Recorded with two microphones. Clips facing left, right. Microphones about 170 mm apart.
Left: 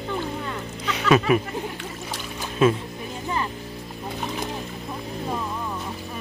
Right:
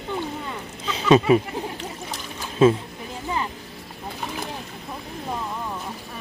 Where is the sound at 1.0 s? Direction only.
25° right (ahead or behind).